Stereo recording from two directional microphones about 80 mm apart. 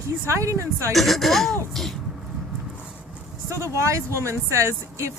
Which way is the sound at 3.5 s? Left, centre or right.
Right.